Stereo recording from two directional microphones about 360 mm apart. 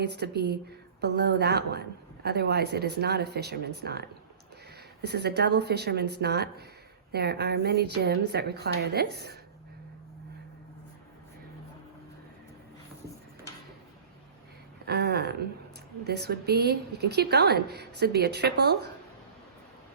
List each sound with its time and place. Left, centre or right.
0.0 s a woman's voice: right
14.8 s a woman's voice: right